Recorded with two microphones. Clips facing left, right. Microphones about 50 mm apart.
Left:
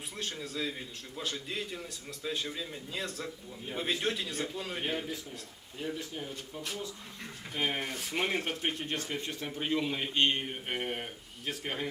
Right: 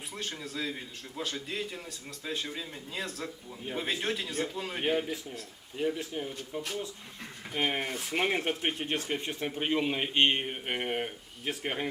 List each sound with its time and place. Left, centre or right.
0.2 s a man's voice: centre
5.8 s speech: right
6.1 s speech: right
7.5 s speech: centre